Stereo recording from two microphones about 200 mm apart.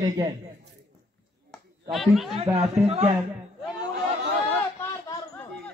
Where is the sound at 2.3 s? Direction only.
30° right (ahead or behind).